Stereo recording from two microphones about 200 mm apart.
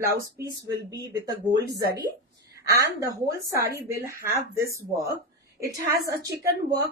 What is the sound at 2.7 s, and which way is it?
A woman's voice, 15° right (ahead or behind).